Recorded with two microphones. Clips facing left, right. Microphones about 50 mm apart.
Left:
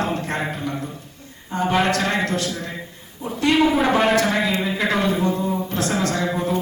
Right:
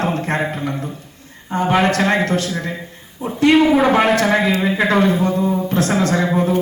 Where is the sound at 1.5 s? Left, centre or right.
Right.